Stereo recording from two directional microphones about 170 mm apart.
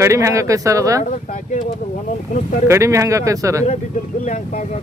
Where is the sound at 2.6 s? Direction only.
15° right (ahead or behind).